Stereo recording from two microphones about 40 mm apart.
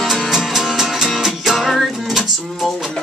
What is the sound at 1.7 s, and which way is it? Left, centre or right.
Music, centre.